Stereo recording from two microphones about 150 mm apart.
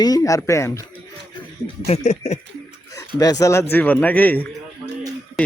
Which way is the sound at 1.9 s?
50° left (ahead or behind).